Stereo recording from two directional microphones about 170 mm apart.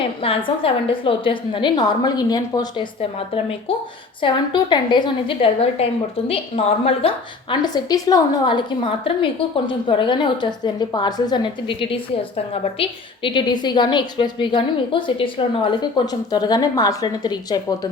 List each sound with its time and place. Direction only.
0.2 s a woman's voice: 35° left (ahead or behind)
4.2 s a woman's voice: 25° left (ahead or behind)
7.5 s a woman's voice: 25° left (ahead or behind)